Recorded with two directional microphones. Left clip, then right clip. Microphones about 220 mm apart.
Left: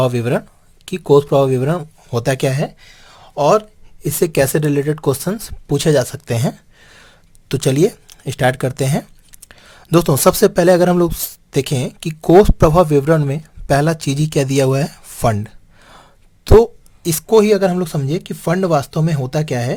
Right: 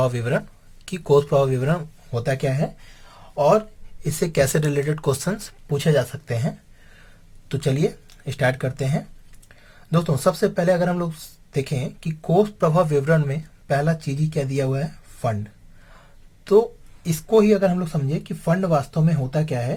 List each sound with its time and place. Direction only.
0.0 s speech: 35° left (ahead or behind)
2.0 s speech: 45° left (ahead or behind)
4.0 s speech: 35° left (ahead or behind)
5.6 s speech: 45° left (ahead or behind)
17.0 s speech: 50° left (ahead or behind)